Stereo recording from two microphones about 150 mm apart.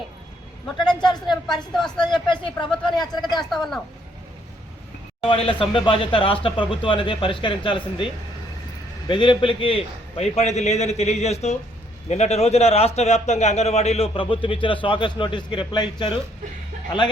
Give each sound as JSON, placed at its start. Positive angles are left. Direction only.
{"t": 0.9, "sound": "speech", "side_deg": 5}
{"t": 2.0, "sound": "a man's voice", "side_deg": 30}
{"t": 3.5, "sound": "speech", "side_deg": 0}
{"t": 5.3, "sound": "a man's voice", "side_deg": 35}